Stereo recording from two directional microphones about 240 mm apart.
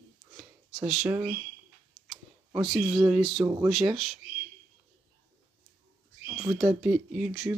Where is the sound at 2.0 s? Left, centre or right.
Centre.